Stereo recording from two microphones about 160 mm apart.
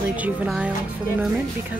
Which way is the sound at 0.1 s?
10° right (ahead or behind).